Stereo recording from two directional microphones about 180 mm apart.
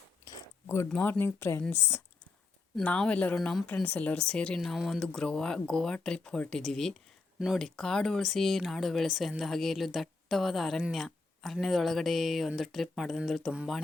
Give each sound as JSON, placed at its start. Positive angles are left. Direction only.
{"t": 0.3, "sound": "chewing", "side_deg": 15}
{"t": 0.9, "sound": "speech", "side_deg": 5}